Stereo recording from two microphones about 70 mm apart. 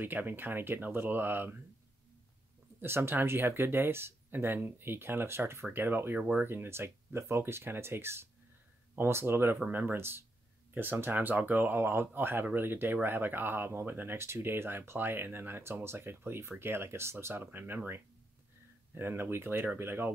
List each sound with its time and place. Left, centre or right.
0.0 s speech: right
2.8 s speech: right